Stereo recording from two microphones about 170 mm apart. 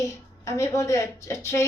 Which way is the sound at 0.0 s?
20° left (ahead or behind).